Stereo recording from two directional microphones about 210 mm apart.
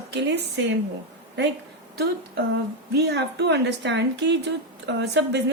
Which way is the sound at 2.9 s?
50° right (ahead or behind).